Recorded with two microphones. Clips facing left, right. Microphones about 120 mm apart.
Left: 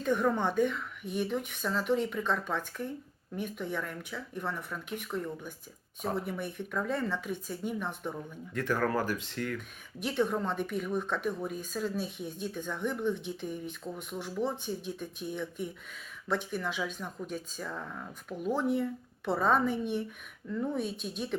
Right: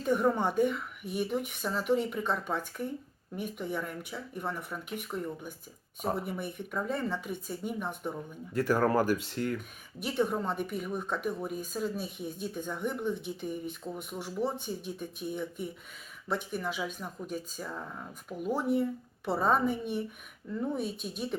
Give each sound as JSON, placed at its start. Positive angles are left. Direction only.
{"t": 0.0, "sound": "speech", "side_deg": -10}
{"t": 8.6, "sound": "speech", "side_deg": -40}
{"t": 9.6, "sound": "speech", "side_deg": -5}